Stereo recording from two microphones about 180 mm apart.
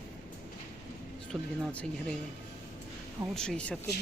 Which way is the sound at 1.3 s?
5° left (ahead or behind).